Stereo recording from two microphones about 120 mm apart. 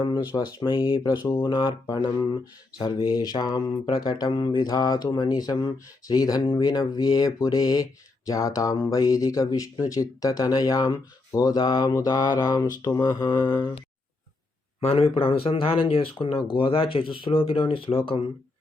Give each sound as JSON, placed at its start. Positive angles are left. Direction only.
{"t": 0.3, "sound": "speech", "side_deg": 40}
{"t": 14.8, "sound": "speech", "side_deg": 55}